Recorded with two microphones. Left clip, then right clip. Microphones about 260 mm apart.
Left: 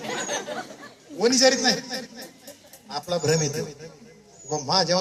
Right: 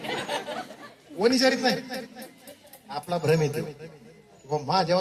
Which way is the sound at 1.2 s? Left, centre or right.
Right.